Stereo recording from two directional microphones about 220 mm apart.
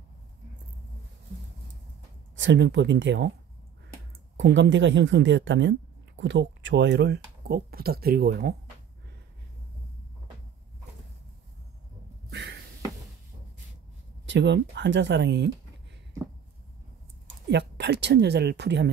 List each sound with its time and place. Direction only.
2.3 s speech: 55° right (ahead or behind)
4.4 s speech: 55° right (ahead or behind)
12.3 s a sound: 50° right (ahead or behind)
14.2 s speech: 55° right (ahead or behind)
17.5 s speech: 50° right (ahead or behind)